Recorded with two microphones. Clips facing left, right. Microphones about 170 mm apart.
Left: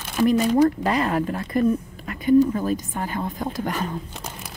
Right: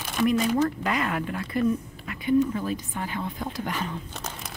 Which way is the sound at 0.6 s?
35° left (ahead or behind).